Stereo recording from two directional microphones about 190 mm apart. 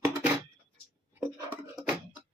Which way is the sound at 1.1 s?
10° right (ahead or behind).